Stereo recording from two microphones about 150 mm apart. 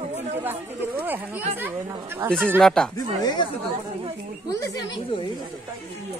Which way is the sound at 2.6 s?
5° left (ahead or behind).